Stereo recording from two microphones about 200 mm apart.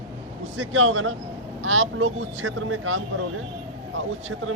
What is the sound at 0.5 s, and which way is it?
Speech, 80° right.